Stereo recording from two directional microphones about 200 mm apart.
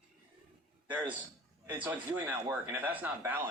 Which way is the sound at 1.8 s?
10° right (ahead or behind).